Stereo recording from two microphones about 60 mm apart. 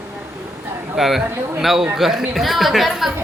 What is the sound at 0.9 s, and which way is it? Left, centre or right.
Speech, centre.